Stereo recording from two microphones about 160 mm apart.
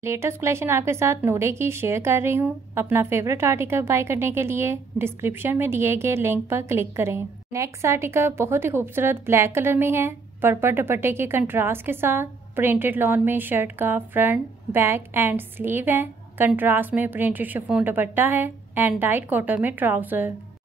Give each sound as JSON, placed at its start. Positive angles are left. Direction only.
{"t": 0.0, "sound": "speech", "side_deg": -15}